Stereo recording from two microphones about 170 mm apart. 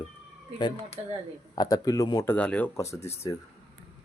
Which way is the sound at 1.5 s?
20° left (ahead or behind).